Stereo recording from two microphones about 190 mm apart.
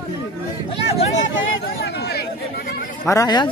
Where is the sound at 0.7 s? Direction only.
35° left (ahead or behind).